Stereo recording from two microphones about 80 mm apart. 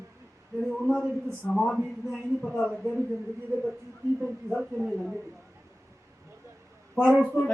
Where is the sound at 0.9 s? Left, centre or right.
Centre.